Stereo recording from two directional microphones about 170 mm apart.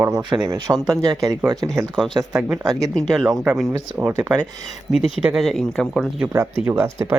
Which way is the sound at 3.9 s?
15° right (ahead or behind).